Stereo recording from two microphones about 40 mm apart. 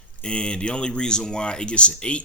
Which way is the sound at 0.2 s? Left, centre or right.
Left.